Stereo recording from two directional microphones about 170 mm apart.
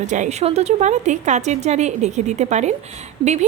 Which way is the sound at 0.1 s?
45° right (ahead or behind).